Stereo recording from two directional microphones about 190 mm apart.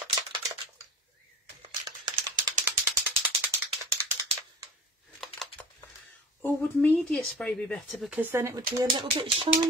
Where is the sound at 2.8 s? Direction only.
10° right (ahead or behind).